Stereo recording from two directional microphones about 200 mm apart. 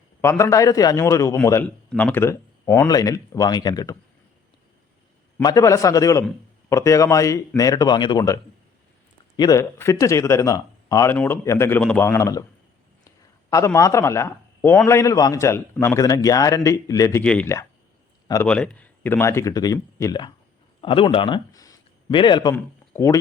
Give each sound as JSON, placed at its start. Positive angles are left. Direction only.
{"t": 0.2, "sound": "a man's voice", "side_deg": 15}
{"t": 5.4, "sound": "a man's voice", "side_deg": 20}
{"t": 13.1, "sound": "a sound", "side_deg": 15}
{"t": 14.8, "sound": "a man's voice", "side_deg": 15}